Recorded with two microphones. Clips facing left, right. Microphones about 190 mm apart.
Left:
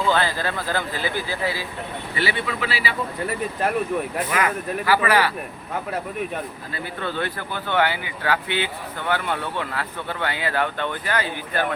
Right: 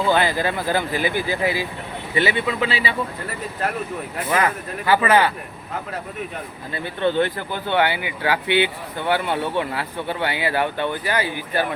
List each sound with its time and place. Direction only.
0.1 s speech: 15° right (ahead or behind)
4.3 s speech: 30° right (ahead or behind)
7.0 s speech: 25° right (ahead or behind)